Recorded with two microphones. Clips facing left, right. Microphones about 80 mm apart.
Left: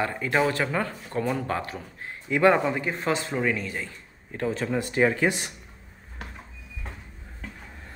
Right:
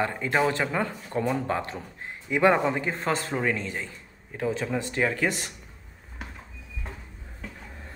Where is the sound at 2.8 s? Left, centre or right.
Right.